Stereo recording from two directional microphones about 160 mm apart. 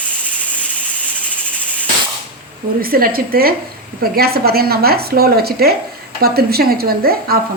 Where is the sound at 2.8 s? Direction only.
65° right (ahead or behind).